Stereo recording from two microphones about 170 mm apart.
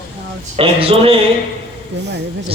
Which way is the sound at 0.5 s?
35° right (ahead or behind).